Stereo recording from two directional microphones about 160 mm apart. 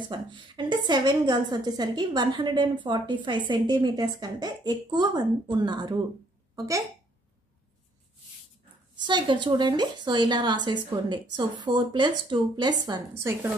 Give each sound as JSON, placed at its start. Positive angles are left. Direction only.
{"t": 0.0, "sound": "a woman's voice", "side_deg": -30}
{"t": 9.0, "sound": "a woman's voice", "side_deg": -30}